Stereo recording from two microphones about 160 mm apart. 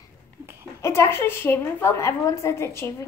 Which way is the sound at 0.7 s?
15° left (ahead or behind).